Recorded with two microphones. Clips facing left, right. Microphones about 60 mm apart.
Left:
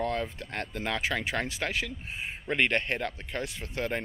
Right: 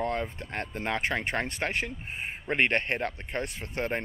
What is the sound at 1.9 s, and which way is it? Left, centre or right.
Speech, right.